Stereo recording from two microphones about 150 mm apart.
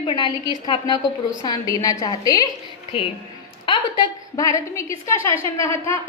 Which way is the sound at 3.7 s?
30° left (ahead or behind).